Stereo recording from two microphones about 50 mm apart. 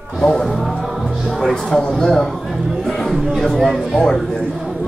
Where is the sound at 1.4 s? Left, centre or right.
Centre.